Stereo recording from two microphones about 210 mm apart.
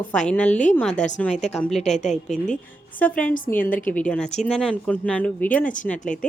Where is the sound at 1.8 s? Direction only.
30° left (ahead or behind).